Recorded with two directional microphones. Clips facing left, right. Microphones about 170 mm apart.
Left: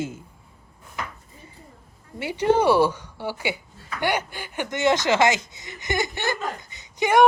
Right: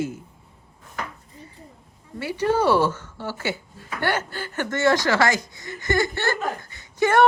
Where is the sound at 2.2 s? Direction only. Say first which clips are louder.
Left 2 dB; 20° left (ahead or behind).